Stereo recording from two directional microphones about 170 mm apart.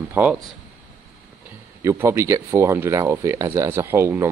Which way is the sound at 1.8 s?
15° right (ahead or behind).